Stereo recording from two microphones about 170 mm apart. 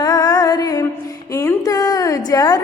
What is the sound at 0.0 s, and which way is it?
Music, 20° left (ahead or behind).